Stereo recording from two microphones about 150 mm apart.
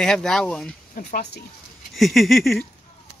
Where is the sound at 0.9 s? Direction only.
65° left (ahead or behind).